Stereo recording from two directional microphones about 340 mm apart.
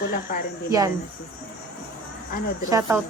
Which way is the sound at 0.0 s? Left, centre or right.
Left.